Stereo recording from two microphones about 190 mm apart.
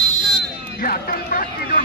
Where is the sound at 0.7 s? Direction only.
50° left (ahead or behind).